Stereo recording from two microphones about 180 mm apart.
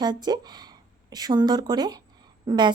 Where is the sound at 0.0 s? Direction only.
25° right (ahead or behind).